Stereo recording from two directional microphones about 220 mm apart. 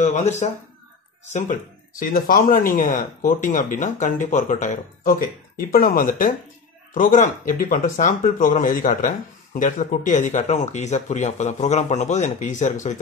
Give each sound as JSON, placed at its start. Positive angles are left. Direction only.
{"t": 0.0, "sound": "speech", "side_deg": 30}